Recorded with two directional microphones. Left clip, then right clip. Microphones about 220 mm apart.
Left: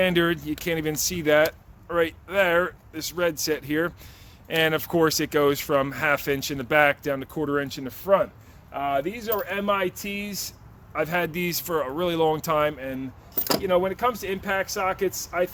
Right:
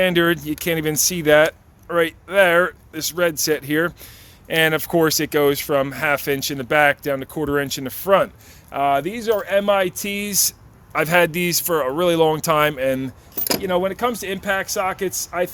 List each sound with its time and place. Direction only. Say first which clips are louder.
0.0 s speech: right 5 dB; 20° right (ahead or behind)
8.7 s speech: right 7 dB; 50° right (ahead or behind)
10.9 s speech: right 9 dB; 40° right (ahead or behind)
13.3 s keys jangling: right 2 dB; 5° right (ahead or behind)
13.6 s speech: right 2 dB; 45° right (ahead or behind)